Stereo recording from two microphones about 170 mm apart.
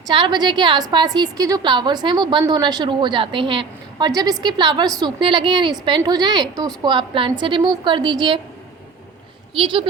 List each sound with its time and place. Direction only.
0.1 s a woman's voice: 30° right (ahead or behind)
9.6 s speech: 30° right (ahead or behind)